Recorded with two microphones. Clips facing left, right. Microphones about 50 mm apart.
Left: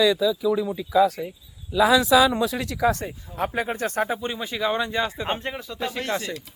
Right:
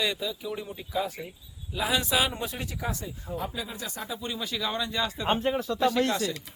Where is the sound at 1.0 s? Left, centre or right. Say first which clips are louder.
Left 13 dB; left.